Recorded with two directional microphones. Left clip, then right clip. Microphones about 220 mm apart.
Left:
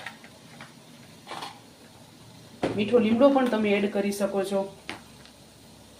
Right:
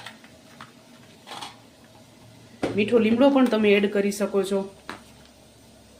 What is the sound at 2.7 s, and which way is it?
Speech, 25° right (ahead or behind).